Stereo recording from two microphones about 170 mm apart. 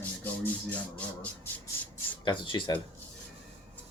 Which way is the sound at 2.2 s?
30° left (ahead or behind).